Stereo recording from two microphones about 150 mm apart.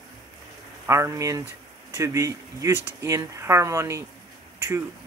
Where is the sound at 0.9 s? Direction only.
20° right (ahead or behind).